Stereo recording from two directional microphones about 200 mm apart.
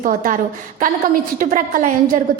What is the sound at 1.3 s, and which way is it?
Speech, 40° right (ahead or behind).